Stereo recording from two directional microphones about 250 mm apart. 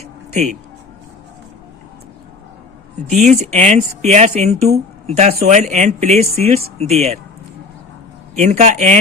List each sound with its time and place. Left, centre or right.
0.0 s music: right
3.1 s speech: right
8.4 s speech: right